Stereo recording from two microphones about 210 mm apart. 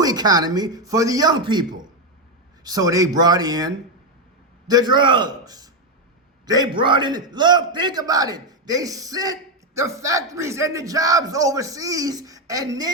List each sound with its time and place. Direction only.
0.0 s a man's voice: 20° right (ahead or behind)
4.7 s a man's voice: 20° right (ahead or behind)